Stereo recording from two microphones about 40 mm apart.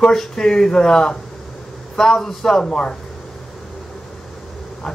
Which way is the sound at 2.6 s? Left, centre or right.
Left.